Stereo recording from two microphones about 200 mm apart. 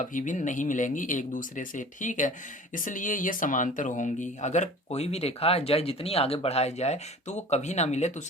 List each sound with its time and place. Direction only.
0.0 s speech: 40° left (ahead or behind)